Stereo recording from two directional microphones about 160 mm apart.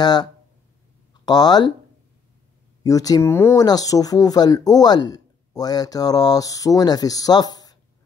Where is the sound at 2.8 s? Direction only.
20° left (ahead or behind).